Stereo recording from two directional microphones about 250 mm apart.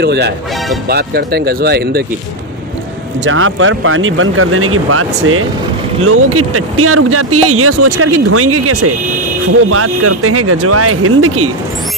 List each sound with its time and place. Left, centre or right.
0.0 s speech: right
3.3 s speech: right